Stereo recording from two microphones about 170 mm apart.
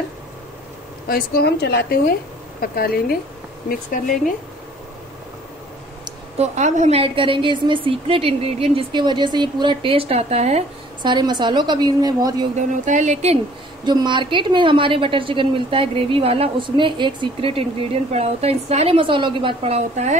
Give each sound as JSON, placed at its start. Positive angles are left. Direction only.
{"t": 1.0, "sound": "a woman's voice", "side_deg": 65}
{"t": 6.3, "sound": "a woman's voice", "side_deg": -40}
{"t": 12.5, "sound": "speech", "side_deg": -45}
{"t": 13.8, "sound": "a woman's voice", "side_deg": -25}